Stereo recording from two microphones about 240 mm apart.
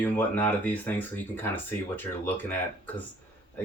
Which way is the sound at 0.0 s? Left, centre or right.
Centre.